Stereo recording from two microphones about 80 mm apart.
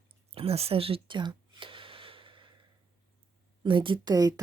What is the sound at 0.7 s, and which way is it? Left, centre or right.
Speech, right.